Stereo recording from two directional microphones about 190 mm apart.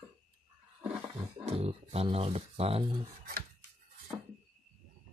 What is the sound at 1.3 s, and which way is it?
Speech, 30° right (ahead or behind).